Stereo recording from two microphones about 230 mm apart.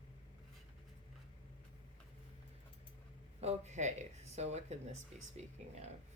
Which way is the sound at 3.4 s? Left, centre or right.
Right.